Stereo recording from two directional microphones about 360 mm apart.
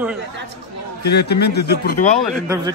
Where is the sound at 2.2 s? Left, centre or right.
Centre.